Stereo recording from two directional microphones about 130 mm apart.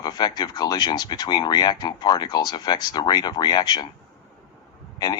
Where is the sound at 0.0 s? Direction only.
30° left (ahead or behind).